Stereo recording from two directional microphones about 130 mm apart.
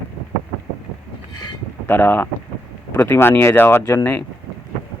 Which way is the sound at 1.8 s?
15° left (ahead or behind).